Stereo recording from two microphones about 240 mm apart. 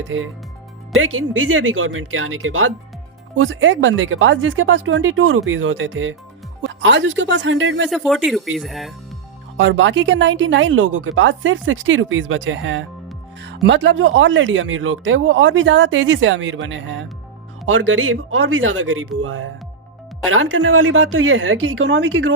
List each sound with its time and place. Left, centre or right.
0.0 s speech: right
7.9 s speech: centre
9.6 s speech: right